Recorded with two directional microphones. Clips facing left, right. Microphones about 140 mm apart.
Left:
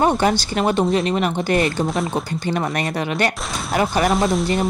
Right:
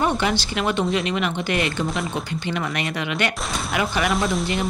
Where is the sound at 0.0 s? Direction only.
40° left (ahead or behind).